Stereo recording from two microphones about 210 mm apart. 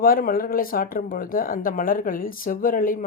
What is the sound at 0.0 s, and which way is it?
Speech, 45° left (ahead or behind).